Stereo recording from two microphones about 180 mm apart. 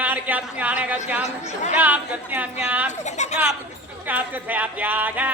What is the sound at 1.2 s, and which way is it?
Speech, 40° left (ahead or behind).